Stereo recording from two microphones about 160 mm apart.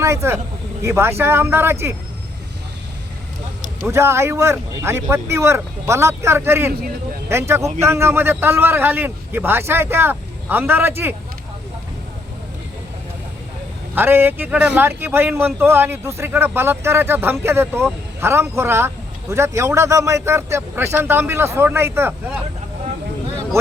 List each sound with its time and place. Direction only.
0.0 s a man's voice: 15° right (ahead or behind)
3.8 s a man's voice: 15° right (ahead or behind)
13.9 s a man's voice: 15° right (ahead or behind)